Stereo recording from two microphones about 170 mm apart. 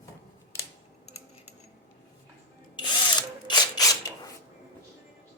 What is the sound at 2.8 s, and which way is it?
Drill, 25° left (ahead or behind).